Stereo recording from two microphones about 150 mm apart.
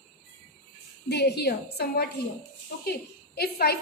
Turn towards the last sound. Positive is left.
turn(degrees=90)